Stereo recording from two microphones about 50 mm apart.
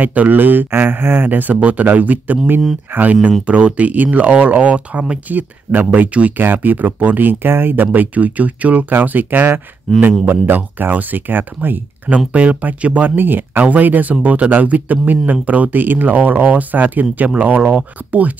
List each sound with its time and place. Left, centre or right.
0.0 s speech: right
5.3 s speech: right
9.9 s speech: centre
10.2 s speech: right
12.3 s speech: right